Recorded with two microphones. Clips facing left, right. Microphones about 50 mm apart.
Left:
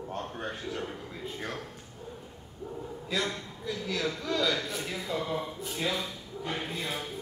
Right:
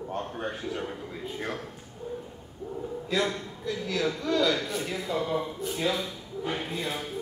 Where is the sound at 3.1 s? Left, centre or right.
Centre.